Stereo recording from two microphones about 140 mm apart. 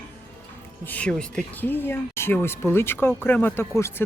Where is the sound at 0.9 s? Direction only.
10° left (ahead or behind).